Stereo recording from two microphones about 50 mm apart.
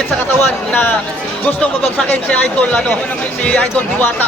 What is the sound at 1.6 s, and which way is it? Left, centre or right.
Speech, left.